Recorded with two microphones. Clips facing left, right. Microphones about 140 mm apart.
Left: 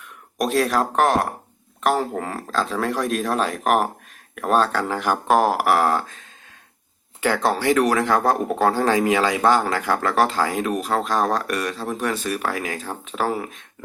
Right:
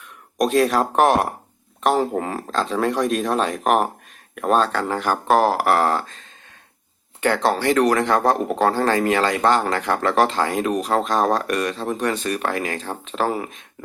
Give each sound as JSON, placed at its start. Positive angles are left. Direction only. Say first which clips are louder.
{"t": 0.3, "sound": "speech", "louder": "right 2 dB", "side_deg": 0}
{"t": 0.9, "sound": "speech", "louder": "right 3 dB", "side_deg": -20}
{"t": 2.5, "sound": "speech", "louder": "right 2 dB", "side_deg": 5}